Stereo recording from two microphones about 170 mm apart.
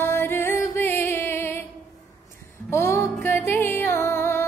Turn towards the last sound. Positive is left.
turn(degrees=15)  # may be behind; listen again after turning